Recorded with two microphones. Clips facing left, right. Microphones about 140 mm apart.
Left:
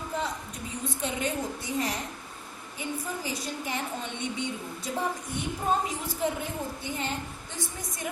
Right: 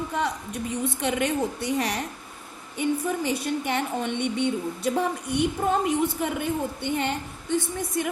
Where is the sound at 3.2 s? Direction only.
65° right (ahead or behind).